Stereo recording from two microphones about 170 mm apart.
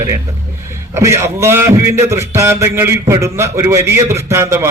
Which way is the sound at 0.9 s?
15° right (ahead or behind).